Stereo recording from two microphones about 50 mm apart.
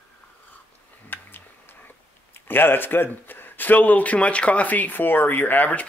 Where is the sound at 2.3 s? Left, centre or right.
Left.